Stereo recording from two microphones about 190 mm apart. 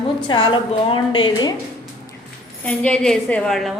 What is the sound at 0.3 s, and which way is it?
A woman's voice, 25° left (ahead or behind).